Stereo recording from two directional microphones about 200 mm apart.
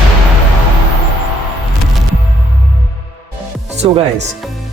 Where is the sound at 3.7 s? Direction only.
30° right (ahead or behind).